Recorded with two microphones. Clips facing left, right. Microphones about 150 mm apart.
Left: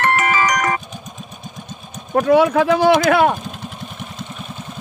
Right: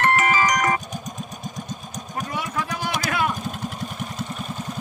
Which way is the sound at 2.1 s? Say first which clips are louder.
Left 16 dB; 65° left (ahead or behind).